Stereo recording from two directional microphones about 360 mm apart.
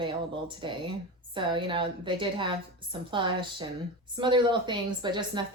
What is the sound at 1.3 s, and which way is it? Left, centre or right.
A woman's voice, centre.